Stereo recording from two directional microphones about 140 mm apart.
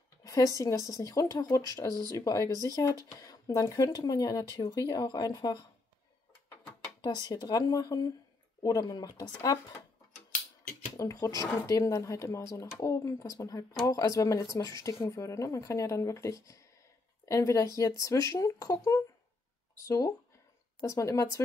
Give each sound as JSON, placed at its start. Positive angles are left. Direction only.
{"t": 0.2, "sound": "speech", "side_deg": 25}
{"t": 7.2, "sound": "speech", "side_deg": 30}
{"t": 11.0, "sound": "speech", "side_deg": 20}
{"t": 20.8, "sound": "speech", "side_deg": 20}